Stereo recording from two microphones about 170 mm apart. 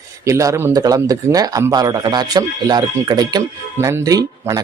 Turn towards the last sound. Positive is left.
turn(degrees=-20)  # may be behind; listen again after turning